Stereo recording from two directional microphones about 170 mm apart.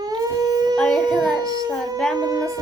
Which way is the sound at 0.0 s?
20° right (ahead or behind).